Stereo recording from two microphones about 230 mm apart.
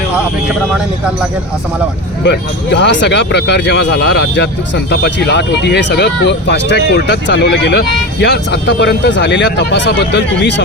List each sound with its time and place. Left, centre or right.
2.2 s speech: left